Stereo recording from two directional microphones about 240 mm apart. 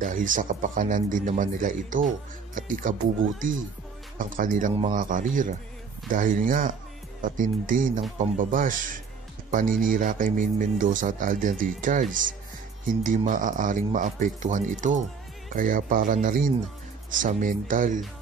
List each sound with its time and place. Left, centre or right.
0.0 s speech: right